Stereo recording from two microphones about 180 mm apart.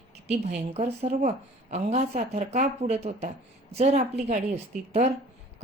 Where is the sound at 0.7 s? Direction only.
40° right (ahead or behind).